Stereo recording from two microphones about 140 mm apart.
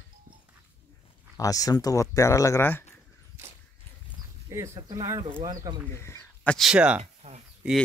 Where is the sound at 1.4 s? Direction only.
25° left (ahead or behind).